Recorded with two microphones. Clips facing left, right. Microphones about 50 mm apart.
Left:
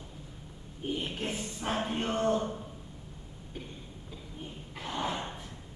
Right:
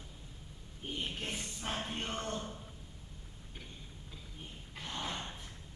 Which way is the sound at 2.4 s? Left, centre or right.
Left.